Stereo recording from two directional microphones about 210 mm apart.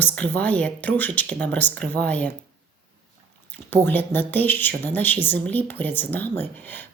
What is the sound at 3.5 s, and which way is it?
Speech, 10° left (ahead or behind).